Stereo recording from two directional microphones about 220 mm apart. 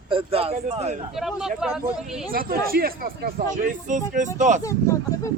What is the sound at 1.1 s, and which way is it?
Speech, centre (ahead or behind).